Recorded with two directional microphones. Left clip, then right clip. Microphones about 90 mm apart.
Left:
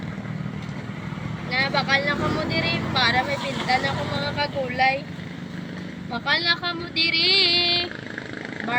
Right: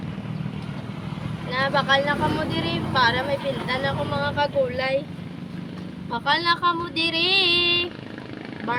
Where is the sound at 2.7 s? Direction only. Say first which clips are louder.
Right 2 dB; 70° right (ahead or behind).